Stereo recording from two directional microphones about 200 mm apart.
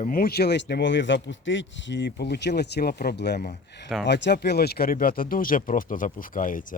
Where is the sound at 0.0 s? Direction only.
45° left (ahead or behind).